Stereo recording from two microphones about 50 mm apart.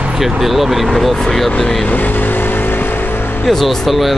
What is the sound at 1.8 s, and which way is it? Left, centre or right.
Vehicle, left.